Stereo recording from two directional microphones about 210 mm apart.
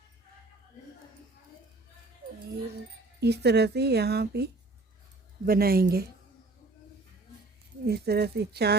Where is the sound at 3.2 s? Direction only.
50° right (ahead or behind).